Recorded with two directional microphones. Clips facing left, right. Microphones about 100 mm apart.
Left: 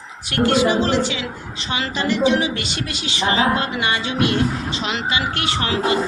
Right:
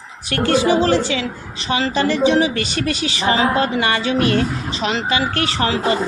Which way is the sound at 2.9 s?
25° left (ahead or behind).